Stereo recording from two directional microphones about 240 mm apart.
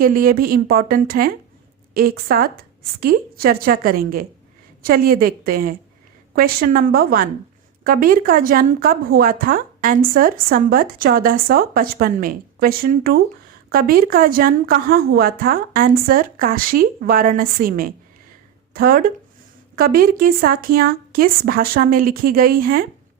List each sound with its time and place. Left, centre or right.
0.0 s speech: right